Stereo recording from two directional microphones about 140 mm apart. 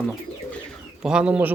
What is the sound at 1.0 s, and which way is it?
Speech, 5° right (ahead or behind).